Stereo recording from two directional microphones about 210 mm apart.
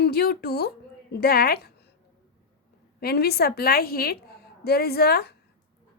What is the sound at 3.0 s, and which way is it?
A woman's voice, 50° left (ahead or behind).